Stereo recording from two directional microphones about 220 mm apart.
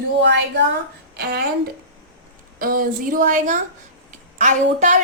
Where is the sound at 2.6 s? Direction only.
40° right (ahead or behind).